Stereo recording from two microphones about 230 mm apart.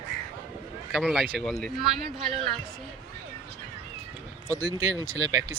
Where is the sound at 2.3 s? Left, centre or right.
Right.